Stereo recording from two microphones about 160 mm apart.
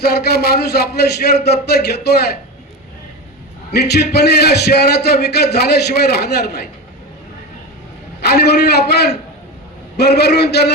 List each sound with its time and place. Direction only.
0.1 s a man's voice: 90° left
3.7 s a man's voice: 90° left
8.2 s a man's voice: 90° left
10.0 s a man's voice: 90° left